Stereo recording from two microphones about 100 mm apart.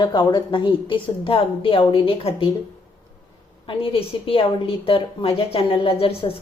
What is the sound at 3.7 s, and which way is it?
A woman's voice, 65° left (ahead or behind).